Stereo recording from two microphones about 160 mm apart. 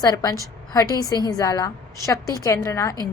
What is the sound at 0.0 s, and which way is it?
A woman's voice, 20° left (ahead or behind).